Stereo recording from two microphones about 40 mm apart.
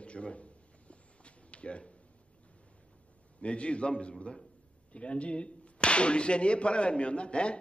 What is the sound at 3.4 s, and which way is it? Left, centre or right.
A man's voice, left.